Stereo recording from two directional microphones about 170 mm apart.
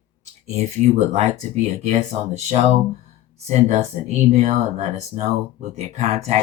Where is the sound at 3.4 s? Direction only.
40° right (ahead or behind).